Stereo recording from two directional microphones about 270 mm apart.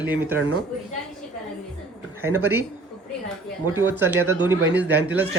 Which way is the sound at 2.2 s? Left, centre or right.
Centre.